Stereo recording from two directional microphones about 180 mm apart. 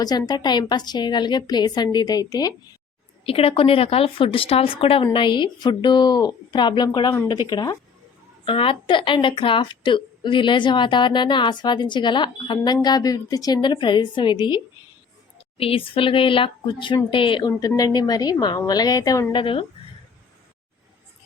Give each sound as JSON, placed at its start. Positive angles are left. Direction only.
{"t": 0.0, "sound": "a woman's voice", "side_deg": 20}
{"t": 3.2, "sound": "a woman's voice", "side_deg": 30}